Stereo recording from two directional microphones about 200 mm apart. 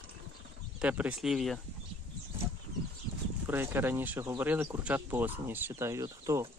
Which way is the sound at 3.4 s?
10° right (ahead or behind).